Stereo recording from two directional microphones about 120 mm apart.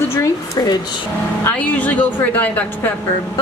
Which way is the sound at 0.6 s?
35° left (ahead or behind).